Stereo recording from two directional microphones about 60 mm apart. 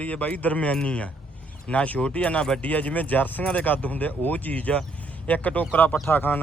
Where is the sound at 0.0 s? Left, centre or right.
Left.